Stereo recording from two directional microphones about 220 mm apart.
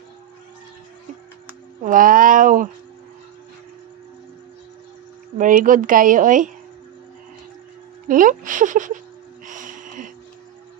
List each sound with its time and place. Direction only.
1.8 s a woman's voice: 35° right (ahead or behind)
5.4 s a woman's voice: 35° right (ahead or behind)
8.0 s a woman's voice: 35° right (ahead or behind)
9.5 s a sound: 35° right (ahead or behind)